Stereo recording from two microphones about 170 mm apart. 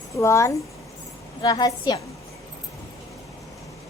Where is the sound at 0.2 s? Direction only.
15° left (ahead or behind).